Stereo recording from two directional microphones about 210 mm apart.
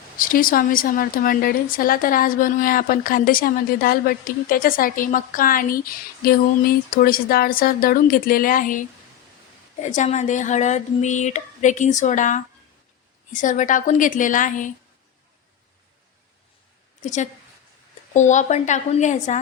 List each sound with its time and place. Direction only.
0.2 s a woman's voice: 40° left (ahead or behind)
9.8 s speech: 35° left (ahead or behind)
17.0 s a woman's voice: 35° left (ahead or behind)